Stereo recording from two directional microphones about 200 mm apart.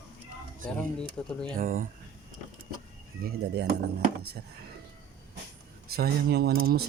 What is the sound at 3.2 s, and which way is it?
Speech, 55° right (ahead or behind).